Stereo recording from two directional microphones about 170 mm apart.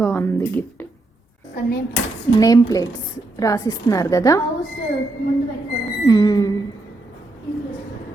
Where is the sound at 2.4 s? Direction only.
20° left (ahead or behind).